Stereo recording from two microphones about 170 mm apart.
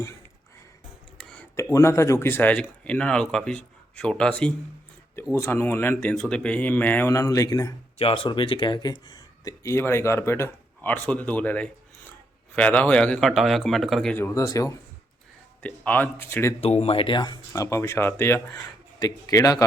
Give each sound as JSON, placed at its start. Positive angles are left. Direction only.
{"t": 1.2, "sound": "a sound", "side_deg": 5}
{"t": 1.7, "sound": "speech", "side_deg": 15}
{"t": 7.9, "sound": "speech", "side_deg": 30}
{"t": 14.2, "sound": "speech", "side_deg": 15}
{"t": 15.6, "sound": "speech", "side_deg": 10}
{"t": 16.6, "sound": "speech", "side_deg": 35}